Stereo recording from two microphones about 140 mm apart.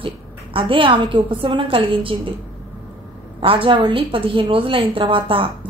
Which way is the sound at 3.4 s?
40° right (ahead or behind).